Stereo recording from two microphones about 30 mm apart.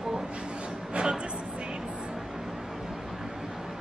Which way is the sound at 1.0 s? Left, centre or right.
Right.